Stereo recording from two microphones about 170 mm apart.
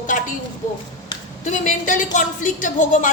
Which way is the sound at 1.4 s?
50° left (ahead or behind).